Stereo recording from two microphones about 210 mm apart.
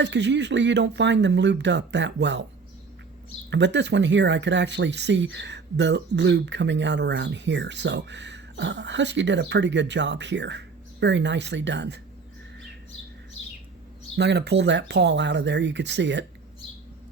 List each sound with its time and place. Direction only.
0.0 s speech: 55° right (ahead or behind)
3.5 s speech: 55° right (ahead or behind)
14.2 s speech: 55° right (ahead or behind)